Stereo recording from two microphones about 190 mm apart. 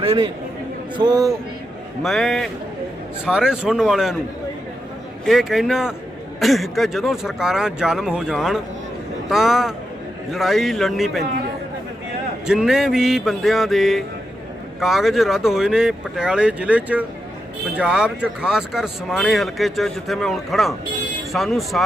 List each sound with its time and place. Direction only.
0.0 s a man's voice: 30° right (ahead or behind)
2.0 s speech: centre (ahead or behind)
5.2 s speech: centre (ahead or behind)
12.5 s speech: 5° right (ahead or behind)